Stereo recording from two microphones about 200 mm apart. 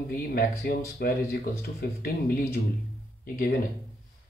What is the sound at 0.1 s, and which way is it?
Speech, 45° left (ahead or behind).